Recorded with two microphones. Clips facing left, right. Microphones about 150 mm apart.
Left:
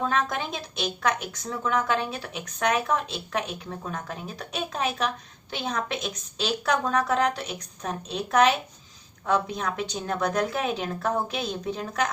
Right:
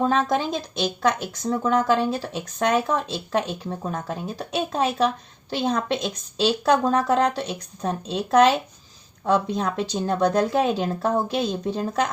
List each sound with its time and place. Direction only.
0.0 s speech: 35° right (ahead or behind)
9.6 s speech: 30° right (ahead or behind)